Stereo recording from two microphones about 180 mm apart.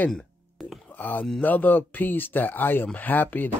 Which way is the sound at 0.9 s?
10° left (ahead or behind).